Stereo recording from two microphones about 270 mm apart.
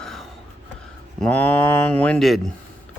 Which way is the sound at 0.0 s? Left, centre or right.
Centre.